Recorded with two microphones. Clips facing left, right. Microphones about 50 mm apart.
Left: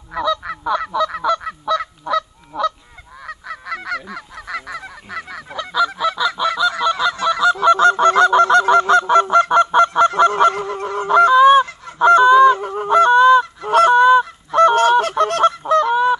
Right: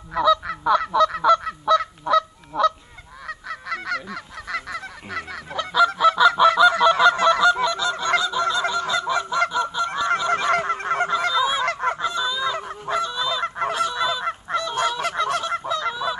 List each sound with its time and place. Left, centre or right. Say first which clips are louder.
0.1 s honk: right 2 dB; centre
7.6 s goose: left 11 dB; left
9.5 s honk: left 11 dB; left
10.5 s goose: right 2 dB; right
11.1 s goose: left 17 dB; left
12.0 s honk: left 15 dB; left